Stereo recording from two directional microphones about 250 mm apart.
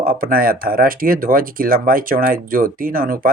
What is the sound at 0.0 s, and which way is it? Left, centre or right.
Speech, right.